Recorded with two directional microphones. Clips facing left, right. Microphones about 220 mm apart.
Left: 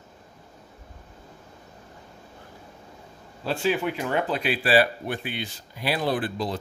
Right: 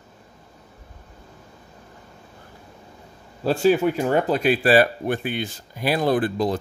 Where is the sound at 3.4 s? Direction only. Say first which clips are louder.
Right 7 dB; 40° right (ahead or behind).